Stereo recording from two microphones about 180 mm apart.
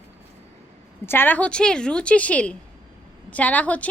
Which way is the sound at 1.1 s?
10° left (ahead or behind).